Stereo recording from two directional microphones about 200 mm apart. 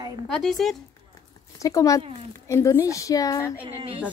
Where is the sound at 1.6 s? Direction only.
15° left (ahead or behind).